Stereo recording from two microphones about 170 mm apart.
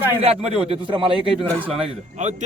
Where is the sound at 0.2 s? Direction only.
35° right (ahead or behind).